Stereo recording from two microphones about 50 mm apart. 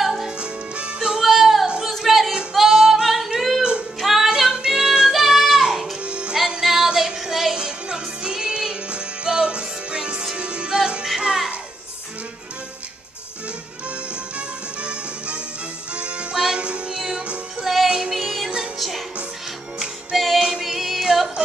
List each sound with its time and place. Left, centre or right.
0.0 s music: centre
0.4 s music: right
1.3 s music: centre
6.0 s music: right
6.6 s female singing: centre
7.2 s music: centre
7.5 s music: centre
13.8 s music: right
18.1 s music: centre
20.2 s music: centre